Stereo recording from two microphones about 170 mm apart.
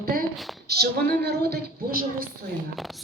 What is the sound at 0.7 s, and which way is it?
A woman's voice, 65° right (ahead or behind).